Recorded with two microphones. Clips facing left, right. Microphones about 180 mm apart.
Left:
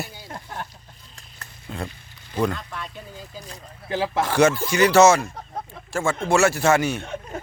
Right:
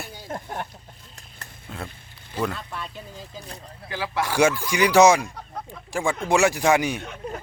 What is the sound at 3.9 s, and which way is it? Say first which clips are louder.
Speech: left 4 dB; 25° left (ahead or behind).